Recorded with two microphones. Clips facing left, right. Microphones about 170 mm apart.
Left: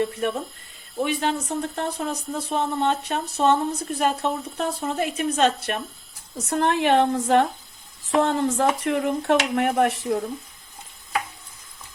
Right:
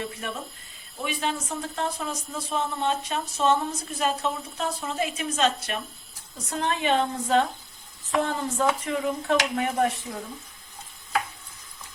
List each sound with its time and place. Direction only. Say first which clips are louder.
0.0 s speech: left 9 dB; 55° left (ahead or behind)
6.3 s speech: left 6 dB; 70° left (ahead or behind)